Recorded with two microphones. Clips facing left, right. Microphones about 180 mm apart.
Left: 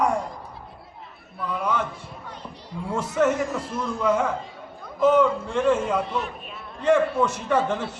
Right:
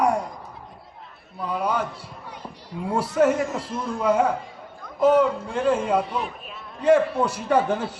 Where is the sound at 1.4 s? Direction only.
35° right (ahead or behind).